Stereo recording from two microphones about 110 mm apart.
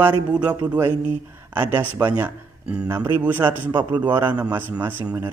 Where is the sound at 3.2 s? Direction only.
15° right (ahead or behind).